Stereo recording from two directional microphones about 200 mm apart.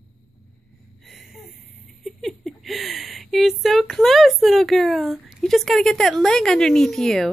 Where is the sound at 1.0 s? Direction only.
Centre (ahead or behind).